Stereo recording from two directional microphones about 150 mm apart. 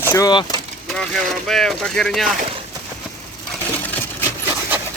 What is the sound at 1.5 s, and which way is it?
Speech, 5° left (ahead or behind).